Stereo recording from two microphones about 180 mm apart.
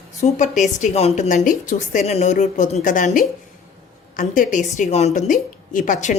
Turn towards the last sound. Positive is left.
turn(degrees=45)  # may be behind; listen again after turning